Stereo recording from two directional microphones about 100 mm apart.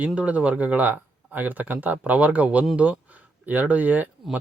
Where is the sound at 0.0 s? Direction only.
15° right (ahead or behind).